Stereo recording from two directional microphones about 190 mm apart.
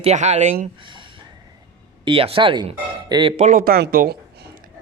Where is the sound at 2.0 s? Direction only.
30° right (ahead or behind).